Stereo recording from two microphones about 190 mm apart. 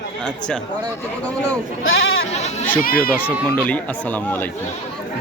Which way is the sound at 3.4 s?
5° left (ahead or behind).